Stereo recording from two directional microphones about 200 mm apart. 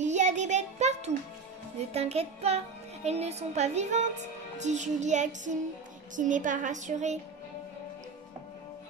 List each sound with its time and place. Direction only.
0.0 s child singing: 35° right (ahead or behind)
2.0 s a child's voice: 30° right (ahead or behind)